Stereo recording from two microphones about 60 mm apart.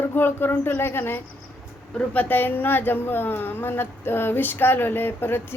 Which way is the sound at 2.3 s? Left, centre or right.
Left.